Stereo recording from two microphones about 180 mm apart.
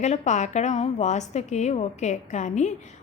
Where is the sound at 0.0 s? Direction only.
40° left (ahead or behind).